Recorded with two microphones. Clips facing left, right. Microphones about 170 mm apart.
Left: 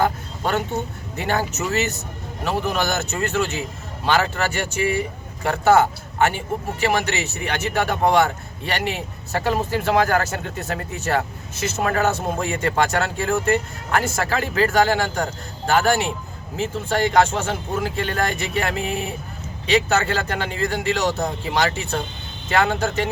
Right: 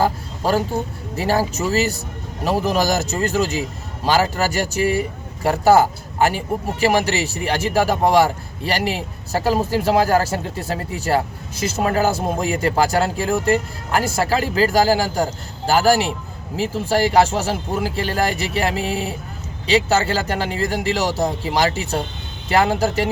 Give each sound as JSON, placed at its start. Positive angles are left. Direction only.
{"t": 0.0, "sound": "speech", "side_deg": -30}